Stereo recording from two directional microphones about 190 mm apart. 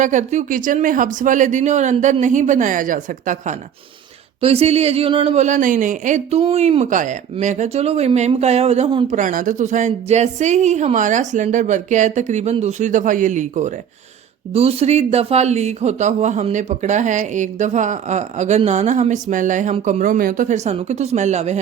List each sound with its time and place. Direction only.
0.0 s speech: 40° right (ahead or behind)
4.4 s speech: 30° right (ahead or behind)
9.0 s speech: 45° right (ahead or behind)